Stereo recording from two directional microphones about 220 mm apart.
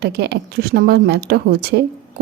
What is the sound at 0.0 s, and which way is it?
A woman's voice, 45° right (ahead or behind).